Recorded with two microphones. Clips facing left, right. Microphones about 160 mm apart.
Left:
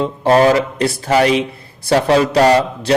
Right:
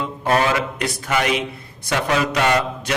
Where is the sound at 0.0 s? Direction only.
30° left (ahead or behind).